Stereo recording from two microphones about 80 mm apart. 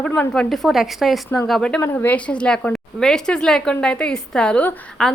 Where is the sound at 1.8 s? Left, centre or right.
Left.